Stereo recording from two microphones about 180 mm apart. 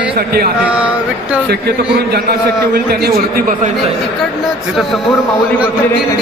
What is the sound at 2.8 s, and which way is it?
Speech, 60° right (ahead or behind).